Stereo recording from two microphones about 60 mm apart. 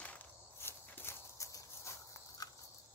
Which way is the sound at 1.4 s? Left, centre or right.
Left.